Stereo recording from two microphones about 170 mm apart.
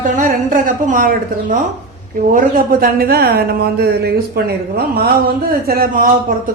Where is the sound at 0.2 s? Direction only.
55° right (ahead or behind).